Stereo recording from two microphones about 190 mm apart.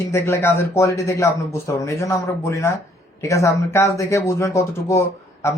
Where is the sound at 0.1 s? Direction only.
15° left (ahead or behind).